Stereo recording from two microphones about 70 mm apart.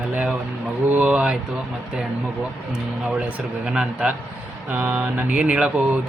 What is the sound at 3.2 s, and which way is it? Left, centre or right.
Speech, centre.